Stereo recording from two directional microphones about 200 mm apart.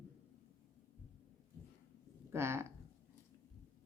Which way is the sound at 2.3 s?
15° right (ahead or behind).